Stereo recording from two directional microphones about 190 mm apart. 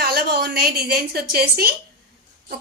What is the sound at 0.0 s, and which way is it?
A woman's voice, 55° right (ahead or behind).